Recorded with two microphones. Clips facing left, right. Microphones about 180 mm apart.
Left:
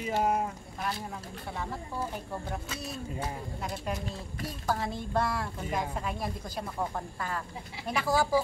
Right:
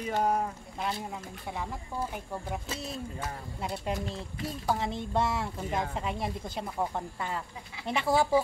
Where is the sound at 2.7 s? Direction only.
25° right (ahead or behind).